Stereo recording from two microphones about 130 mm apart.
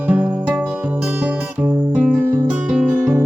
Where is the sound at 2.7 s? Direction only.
5° right (ahead or behind).